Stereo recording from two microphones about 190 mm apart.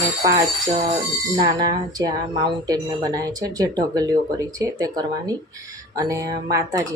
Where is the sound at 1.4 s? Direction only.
20° right (ahead or behind).